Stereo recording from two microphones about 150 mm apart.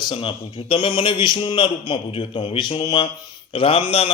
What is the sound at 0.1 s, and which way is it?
A man's voice, 35° left (ahead or behind).